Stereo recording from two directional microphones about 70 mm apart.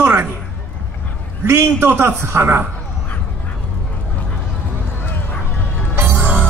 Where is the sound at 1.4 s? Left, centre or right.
Right.